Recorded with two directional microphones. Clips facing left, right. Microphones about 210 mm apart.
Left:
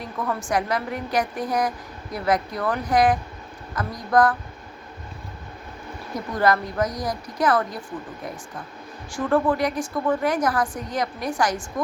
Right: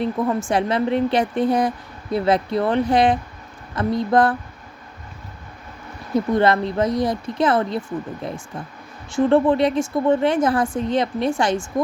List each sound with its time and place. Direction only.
0.0 s a woman's voice: 25° right (ahead or behind)
6.1 s a woman's voice: 25° right (ahead or behind)
9.1 s a woman's voice: 25° right (ahead or behind)